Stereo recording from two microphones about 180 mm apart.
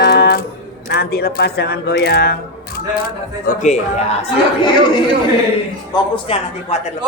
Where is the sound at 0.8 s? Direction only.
65° left (ahead or behind).